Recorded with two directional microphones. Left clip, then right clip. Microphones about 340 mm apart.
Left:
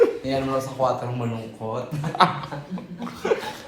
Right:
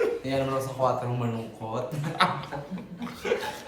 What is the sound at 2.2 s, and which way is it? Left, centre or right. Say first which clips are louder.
Speech: left 6 dB; centre.